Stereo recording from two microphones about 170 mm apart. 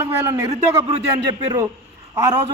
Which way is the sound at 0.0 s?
15° right (ahead or behind).